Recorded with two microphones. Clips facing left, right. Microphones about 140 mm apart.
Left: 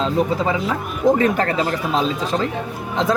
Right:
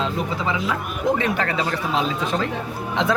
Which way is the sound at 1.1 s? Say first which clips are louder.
Left 5 dB; 40° left (ahead or behind).